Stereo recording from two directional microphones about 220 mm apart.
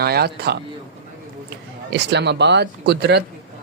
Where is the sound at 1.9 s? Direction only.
50° right (ahead or behind).